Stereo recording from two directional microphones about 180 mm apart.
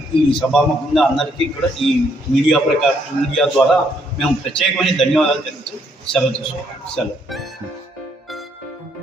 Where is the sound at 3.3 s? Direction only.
Centre (ahead or behind).